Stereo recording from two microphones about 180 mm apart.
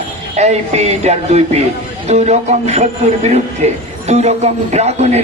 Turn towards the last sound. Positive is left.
turn(degrees=-40)  # may be behind; listen again after turning